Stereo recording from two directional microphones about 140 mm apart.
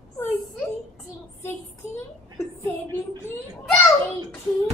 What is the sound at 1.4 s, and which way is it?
Child singing, 20° left (ahead or behind).